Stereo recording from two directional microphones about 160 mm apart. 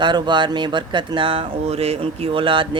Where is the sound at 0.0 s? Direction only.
30° right (ahead or behind).